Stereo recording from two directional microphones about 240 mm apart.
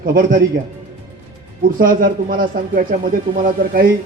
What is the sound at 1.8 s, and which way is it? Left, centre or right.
Speech, right.